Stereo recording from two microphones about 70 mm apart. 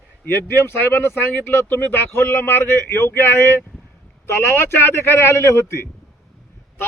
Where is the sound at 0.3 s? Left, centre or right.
Left.